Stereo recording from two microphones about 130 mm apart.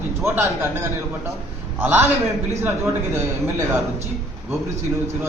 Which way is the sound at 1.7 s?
15° right (ahead or behind).